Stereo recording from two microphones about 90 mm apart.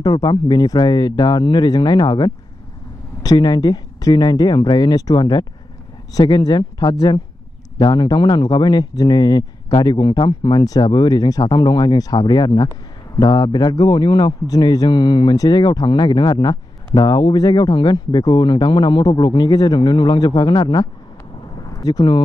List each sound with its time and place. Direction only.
0.0 s a man's voice: 50° left (ahead or behind)
10.6 s a man's voice: 45° left (ahead or behind)
21.7 s speech: 40° left (ahead or behind)